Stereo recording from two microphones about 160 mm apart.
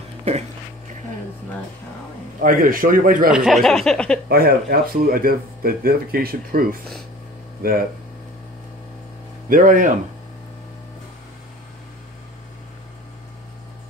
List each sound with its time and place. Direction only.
2.4 s a man's voice: 60° right (ahead or behind)
3.3 s speech: centre (ahead or behind)
4.3 s a man's voice: 75° right (ahead or behind)
9.5 s a man's voice: 55° right (ahead or behind)